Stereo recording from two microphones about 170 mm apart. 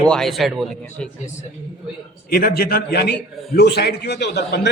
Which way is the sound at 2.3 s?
60° left (ahead or behind).